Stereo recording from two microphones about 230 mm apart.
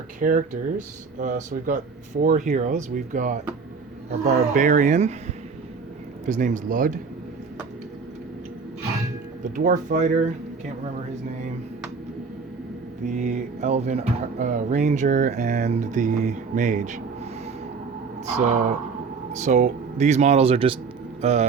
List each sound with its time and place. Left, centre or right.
0.2 s speech: right
6.2 s speech: right
9.4 s speech: right
13.1 s speech: right
18.3 s speech: right